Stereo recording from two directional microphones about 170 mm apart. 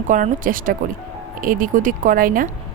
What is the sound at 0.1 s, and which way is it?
Speech, 50° right (ahead or behind).